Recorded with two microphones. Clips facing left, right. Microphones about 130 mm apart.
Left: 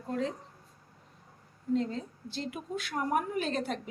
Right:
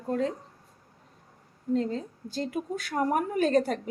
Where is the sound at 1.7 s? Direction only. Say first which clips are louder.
Right 3 dB; 40° right (ahead or behind).